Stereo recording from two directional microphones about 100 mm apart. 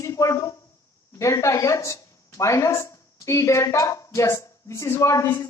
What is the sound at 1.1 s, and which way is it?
A woman's voice, 30° left (ahead or behind).